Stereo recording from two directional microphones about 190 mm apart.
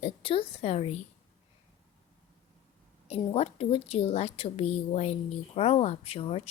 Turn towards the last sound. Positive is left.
turn(degrees=30)  # may be behind; listen again after turning